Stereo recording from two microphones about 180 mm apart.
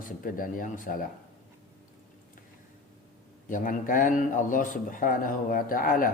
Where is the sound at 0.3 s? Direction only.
50° left (ahead or behind).